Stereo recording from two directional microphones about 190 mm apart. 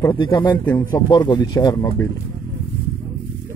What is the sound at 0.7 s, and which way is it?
Speech, 15° left (ahead or behind).